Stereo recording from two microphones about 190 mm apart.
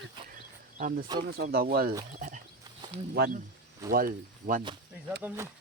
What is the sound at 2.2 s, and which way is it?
Speech, 40° right (ahead or behind).